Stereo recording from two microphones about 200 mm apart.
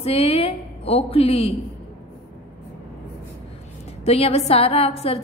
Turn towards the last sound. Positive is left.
turn(degrees=30)  # may be behind; listen again after turning